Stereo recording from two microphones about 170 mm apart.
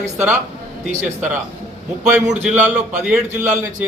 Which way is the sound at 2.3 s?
5° right (ahead or behind).